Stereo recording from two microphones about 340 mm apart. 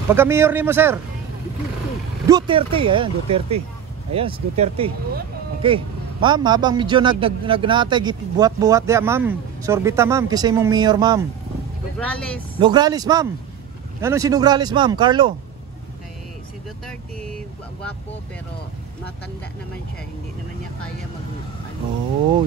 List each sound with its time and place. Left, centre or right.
0.1 s speech: centre
2.2 s speech: centre
12.0 s speech: centre
12.5 s speech: centre